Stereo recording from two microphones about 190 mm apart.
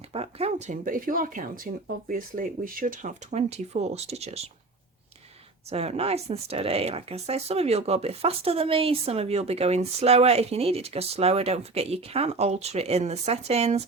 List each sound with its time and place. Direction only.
0.1 s speech: 30° right (ahead or behind)
0.9 s speech: 45° right (ahead or behind)
5.7 s speech: 35° right (ahead or behind)